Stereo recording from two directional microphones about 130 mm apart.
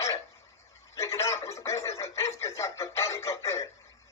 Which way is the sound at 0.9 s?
25° left (ahead or behind).